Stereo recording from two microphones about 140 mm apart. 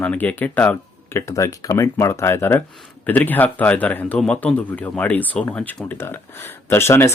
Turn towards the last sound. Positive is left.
turn(degrees=20)  # may be behind; listen again after turning